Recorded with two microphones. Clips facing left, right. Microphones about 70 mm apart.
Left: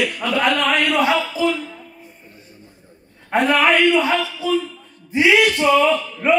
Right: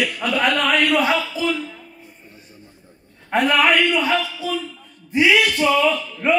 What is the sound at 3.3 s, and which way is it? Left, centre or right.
A man's voice, left.